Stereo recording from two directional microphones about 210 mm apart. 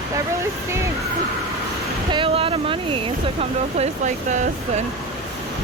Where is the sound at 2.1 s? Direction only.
25° right (ahead or behind).